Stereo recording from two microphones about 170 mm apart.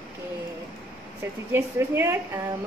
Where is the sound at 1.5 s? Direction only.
15° right (ahead or behind).